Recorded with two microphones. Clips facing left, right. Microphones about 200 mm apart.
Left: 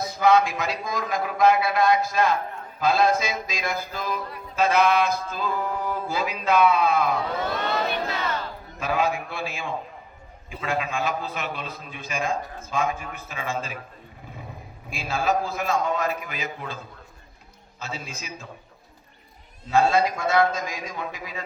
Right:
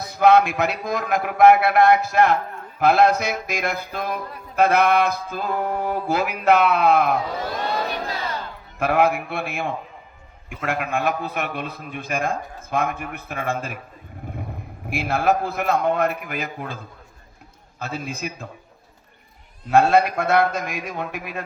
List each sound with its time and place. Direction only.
0.1 s a man's voice: 65° right (ahead or behind)
7.9 s battle cry: 35° right (ahead or behind)
8.8 s a man's voice: 65° right (ahead or behind)
14.8 s a man's voice: 60° right (ahead or behind)
17.7 s a man's voice: 55° right (ahead or behind)
19.7 s a man's voice: 60° right (ahead or behind)